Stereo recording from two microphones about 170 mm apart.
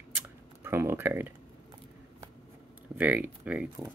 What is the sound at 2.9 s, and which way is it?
Speech, 10° right (ahead or behind).